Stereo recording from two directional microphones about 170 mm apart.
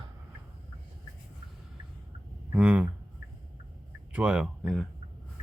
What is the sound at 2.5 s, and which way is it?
Speech, 10° right (ahead or behind).